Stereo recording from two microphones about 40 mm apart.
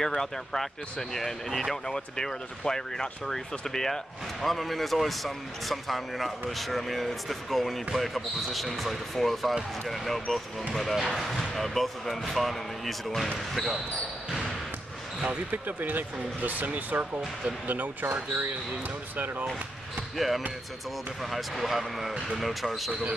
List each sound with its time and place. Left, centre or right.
0.0 s speech: centre
15.2 s speech: right
20.2 s speech: centre